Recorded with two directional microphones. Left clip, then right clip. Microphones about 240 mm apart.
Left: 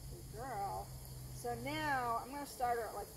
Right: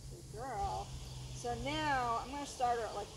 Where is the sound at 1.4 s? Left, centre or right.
Centre.